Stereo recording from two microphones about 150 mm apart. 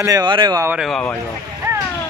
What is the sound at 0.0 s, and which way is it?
Speech, 25° right (ahead or behind).